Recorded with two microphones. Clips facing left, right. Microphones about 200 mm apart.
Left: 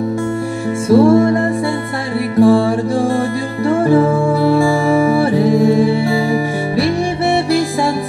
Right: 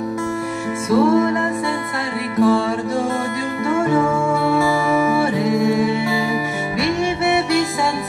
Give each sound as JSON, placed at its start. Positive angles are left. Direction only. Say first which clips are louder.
{"t": 0.8, "sound": "music", "louder": "left 6 dB", "side_deg": 30}